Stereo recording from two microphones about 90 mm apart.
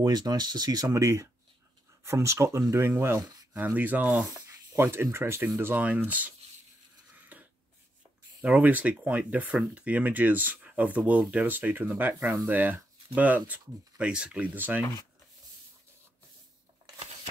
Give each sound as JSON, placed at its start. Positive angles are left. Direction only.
{"t": 0.0, "sound": "speech", "side_deg": -50}
{"t": 3.5, "sound": "speech", "side_deg": -20}
{"t": 7.2, "sound": "a sound", "side_deg": -20}
{"t": 8.4, "sound": "speech", "side_deg": -15}